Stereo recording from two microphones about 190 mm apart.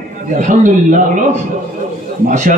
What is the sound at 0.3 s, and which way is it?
A man's voice, 40° right (ahead or behind).